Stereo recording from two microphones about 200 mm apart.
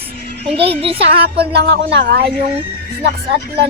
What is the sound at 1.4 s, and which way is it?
Speech, 55° right (ahead or behind).